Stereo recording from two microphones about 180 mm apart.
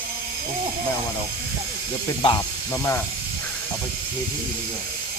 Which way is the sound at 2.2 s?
15° left (ahead or behind).